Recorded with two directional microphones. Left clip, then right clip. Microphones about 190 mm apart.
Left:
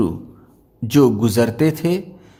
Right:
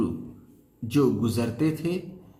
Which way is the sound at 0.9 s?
60° left (ahead or behind).